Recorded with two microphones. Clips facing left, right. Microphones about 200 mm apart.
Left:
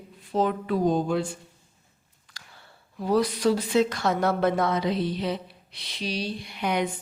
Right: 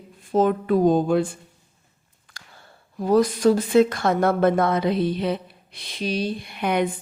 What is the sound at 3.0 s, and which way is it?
Speech, 45° right (ahead or behind).